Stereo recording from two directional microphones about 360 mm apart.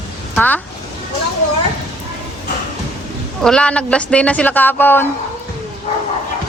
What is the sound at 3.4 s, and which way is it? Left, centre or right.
A woman's voice, centre.